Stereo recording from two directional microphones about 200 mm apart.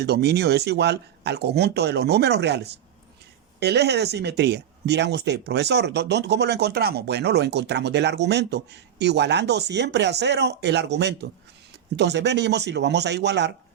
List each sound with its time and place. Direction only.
0.0 s speech: 55° right (ahead or behind)